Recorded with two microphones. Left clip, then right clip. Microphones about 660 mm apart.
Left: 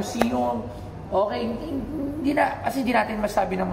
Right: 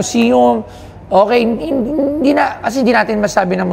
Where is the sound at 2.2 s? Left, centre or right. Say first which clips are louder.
Right 6 dB; right.